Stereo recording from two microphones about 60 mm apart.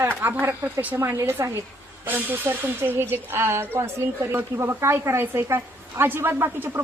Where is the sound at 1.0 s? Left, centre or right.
Right.